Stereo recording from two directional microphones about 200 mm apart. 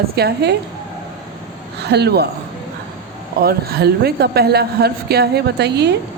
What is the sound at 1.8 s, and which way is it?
Speech, 55° right (ahead or behind).